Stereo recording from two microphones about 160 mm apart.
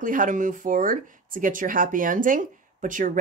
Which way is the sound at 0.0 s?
55° right (ahead or behind).